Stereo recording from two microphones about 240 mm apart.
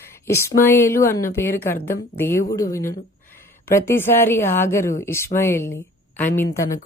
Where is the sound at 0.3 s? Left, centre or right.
Centre.